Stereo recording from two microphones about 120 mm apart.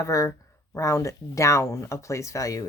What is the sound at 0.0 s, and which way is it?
Speech, 25° left (ahead or behind).